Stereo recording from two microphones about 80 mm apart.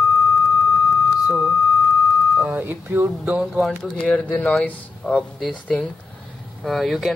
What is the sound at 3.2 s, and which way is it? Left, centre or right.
Speech, centre.